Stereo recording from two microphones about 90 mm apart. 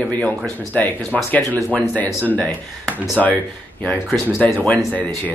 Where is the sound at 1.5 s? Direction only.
15° right (ahead or behind).